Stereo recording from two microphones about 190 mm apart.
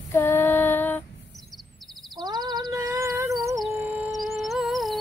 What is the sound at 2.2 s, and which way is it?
Cat, 20° right (ahead or behind).